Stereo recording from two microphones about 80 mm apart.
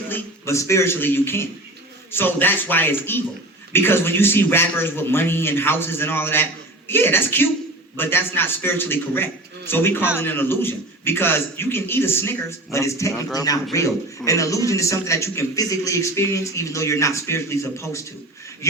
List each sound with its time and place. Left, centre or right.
0.1 s a man's voice: left